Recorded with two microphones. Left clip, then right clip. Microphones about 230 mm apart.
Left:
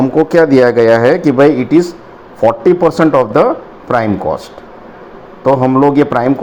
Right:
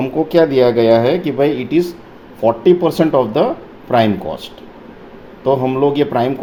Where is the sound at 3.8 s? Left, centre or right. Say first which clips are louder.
Left 1 dB; left.